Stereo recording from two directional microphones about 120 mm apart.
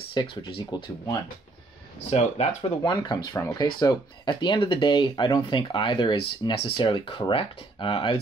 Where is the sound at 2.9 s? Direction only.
35° left (ahead or behind).